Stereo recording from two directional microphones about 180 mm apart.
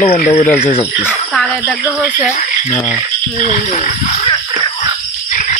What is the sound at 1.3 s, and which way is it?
Speech, centre (ahead or behind).